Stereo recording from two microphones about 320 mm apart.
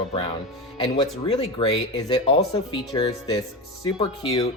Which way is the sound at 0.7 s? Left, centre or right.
Centre.